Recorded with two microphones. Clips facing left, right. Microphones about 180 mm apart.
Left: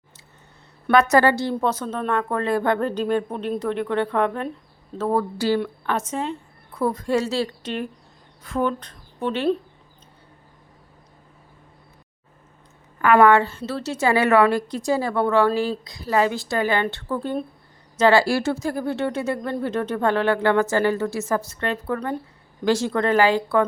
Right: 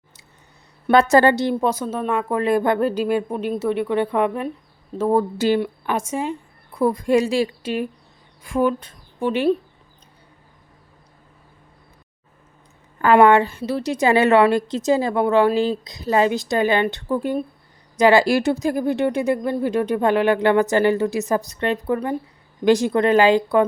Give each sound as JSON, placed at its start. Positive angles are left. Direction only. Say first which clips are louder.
{"t": 0.9, "sound": "a woman's voice", "louder": "right 2 dB", "side_deg": -25}
{"t": 13.0, "sound": "a woman's voice", "louder": "right 2 dB", "side_deg": -25}